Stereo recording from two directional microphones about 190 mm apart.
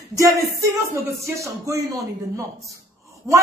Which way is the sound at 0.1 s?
15° right (ahead or behind).